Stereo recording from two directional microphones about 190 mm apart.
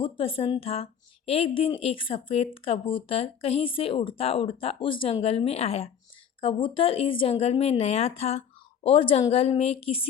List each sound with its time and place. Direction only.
0.0 s speech: 30° left (ahead or behind)